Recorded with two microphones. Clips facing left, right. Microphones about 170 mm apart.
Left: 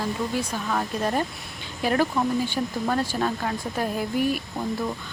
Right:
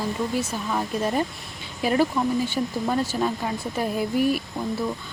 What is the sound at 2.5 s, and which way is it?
Speech, 10° right (ahead or behind).